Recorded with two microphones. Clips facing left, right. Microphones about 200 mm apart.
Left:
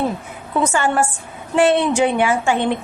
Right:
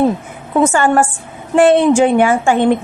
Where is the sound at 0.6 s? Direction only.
50° right (ahead or behind).